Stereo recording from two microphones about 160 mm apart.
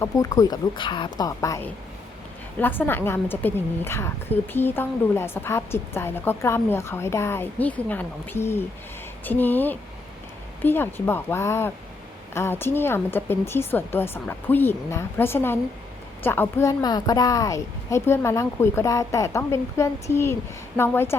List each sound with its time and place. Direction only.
0.0 s a woman's voice: 20° left (ahead or behind)